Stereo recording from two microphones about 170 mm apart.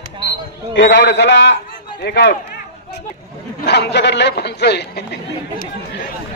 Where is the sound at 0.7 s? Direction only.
90° left.